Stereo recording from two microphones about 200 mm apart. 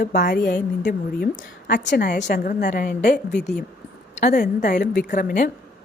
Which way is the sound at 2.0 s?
40° left (ahead or behind).